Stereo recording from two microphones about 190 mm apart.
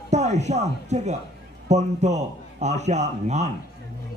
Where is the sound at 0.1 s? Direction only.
35° right (ahead or behind).